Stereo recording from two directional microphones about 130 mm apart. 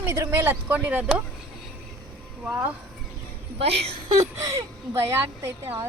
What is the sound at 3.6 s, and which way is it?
Speech, 50° right (ahead or behind).